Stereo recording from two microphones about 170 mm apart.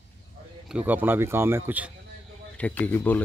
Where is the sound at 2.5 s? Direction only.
10° left (ahead or behind).